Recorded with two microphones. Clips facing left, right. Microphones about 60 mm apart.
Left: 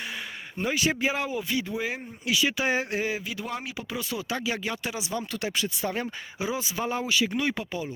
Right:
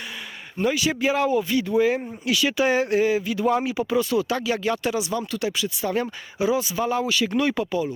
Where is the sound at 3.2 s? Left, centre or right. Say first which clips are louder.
Right 9 dB; centre.